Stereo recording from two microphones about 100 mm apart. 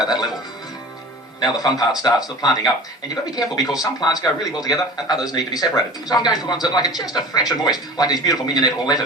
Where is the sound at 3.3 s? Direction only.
40° left (ahead or behind).